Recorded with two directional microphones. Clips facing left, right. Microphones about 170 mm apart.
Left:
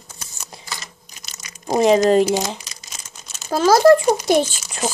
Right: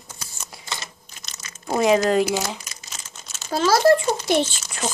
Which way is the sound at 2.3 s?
15° left (ahead or behind).